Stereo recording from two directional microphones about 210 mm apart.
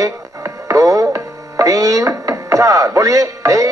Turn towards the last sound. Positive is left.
turn(degrees=-15)  # may be behind; listen again after turning